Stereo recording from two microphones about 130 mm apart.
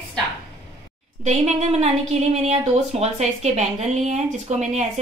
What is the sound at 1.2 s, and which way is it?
Speech, 60° right (ahead or behind).